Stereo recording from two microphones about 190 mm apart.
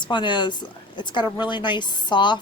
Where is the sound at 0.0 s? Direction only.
25° left (ahead or behind).